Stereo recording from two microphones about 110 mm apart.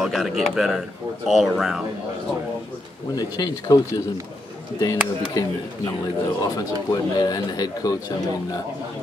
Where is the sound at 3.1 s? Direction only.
35° left (ahead or behind).